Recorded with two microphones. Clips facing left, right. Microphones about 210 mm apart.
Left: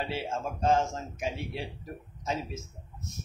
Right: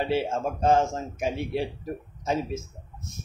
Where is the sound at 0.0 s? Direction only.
55° right (ahead or behind).